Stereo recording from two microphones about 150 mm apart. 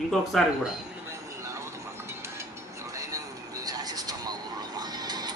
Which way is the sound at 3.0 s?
25° right (ahead or behind).